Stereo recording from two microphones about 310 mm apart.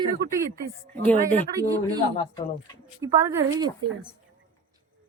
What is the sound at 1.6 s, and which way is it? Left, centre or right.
A woman's voice, centre.